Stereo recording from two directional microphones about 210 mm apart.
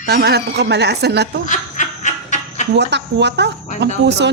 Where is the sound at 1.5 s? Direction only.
35° left (ahead or behind).